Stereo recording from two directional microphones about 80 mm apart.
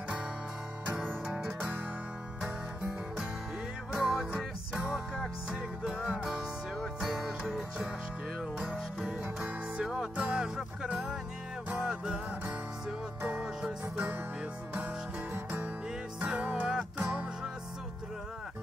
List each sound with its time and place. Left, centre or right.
1.2 s music: centre
3.9 s music: centre
13.4 s music: centre
15.3 s music: right